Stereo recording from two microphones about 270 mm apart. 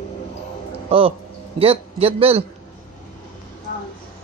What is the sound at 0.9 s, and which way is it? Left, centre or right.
A man's voice, right.